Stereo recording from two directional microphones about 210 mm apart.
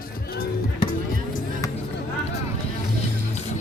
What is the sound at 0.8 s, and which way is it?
Music, 25° left (ahead or behind).